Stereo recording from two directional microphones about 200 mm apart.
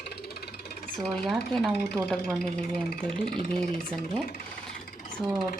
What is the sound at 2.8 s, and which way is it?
Speech, 45° left (ahead or behind).